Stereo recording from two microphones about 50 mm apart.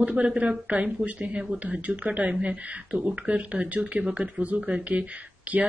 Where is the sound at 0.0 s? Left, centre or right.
Right.